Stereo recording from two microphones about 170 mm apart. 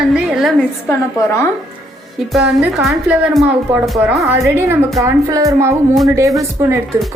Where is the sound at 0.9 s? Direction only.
15° left (ahead or behind).